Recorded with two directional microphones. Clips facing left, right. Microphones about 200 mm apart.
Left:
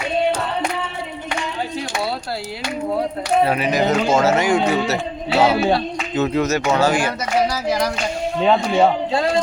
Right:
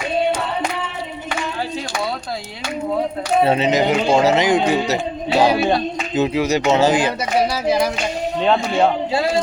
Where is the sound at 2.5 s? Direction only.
5° left (ahead or behind).